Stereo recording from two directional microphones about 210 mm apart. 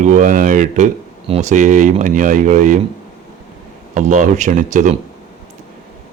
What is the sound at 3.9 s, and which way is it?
Speech, 35° right (ahead or behind).